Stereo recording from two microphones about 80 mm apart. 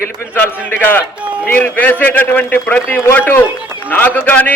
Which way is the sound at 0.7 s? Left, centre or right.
Left.